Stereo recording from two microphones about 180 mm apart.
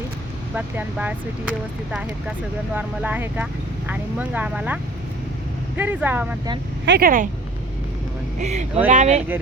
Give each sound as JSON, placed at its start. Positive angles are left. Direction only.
{"t": 0.5, "sound": "speech", "side_deg": -10}
{"t": 6.8, "sound": "speech", "side_deg": -70}
{"t": 8.4, "sound": "speech", "side_deg": -40}